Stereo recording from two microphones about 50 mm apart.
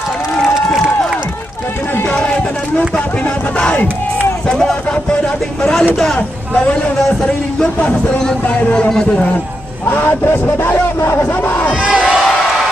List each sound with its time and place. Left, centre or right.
0.4 s a sound: centre
2.0 s a sound: left
4.5 s speech: centre
6.1 s speech: left
9.8 s speech: left
11.8 s crowd: right